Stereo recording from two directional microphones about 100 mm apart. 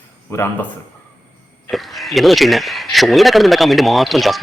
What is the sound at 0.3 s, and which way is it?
Speech, 25° left (ahead or behind).